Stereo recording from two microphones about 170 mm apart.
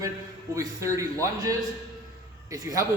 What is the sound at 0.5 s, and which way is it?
A man's voice, 20° right (ahead or behind).